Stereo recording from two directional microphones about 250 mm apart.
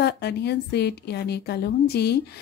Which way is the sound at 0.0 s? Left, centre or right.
Left.